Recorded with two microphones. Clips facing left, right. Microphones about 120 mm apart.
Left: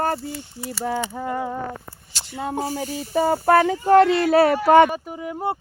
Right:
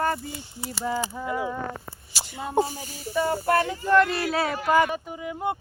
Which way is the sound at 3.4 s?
90° left.